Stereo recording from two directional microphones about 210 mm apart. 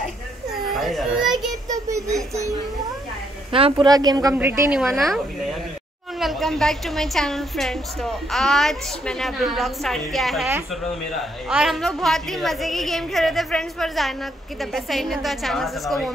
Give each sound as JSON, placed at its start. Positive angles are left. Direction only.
{"t": 0.7, "sound": "baby cry", "side_deg": 0}
{"t": 1.3, "sound": "child singing", "side_deg": -15}
{"t": 3.5, "sound": "a woman's voice", "side_deg": -25}